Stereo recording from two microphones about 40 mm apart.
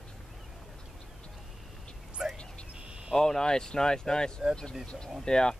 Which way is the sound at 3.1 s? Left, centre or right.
Centre.